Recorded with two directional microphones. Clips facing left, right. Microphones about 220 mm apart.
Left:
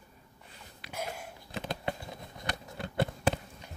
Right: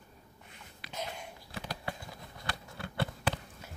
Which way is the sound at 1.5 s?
20° left (ahead or behind).